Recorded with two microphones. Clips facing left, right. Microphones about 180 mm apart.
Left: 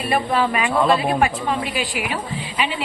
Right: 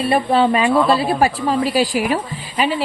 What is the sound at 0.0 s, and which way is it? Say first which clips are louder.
Speech: right 5 dB; 30° right (ahead or behind).